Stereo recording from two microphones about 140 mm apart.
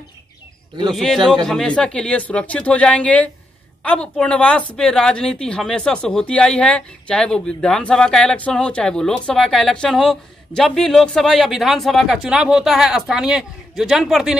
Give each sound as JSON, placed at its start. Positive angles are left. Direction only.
{"t": 0.9, "sound": "a woman's voice", "side_deg": 0}